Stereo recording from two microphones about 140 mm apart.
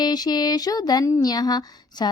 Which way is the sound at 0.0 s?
30° left (ahead or behind).